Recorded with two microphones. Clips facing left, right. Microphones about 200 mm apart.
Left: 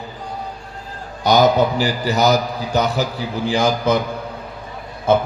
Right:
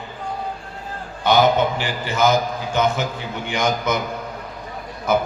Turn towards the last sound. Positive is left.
turn(degrees=30)  # may be behind; listen again after turning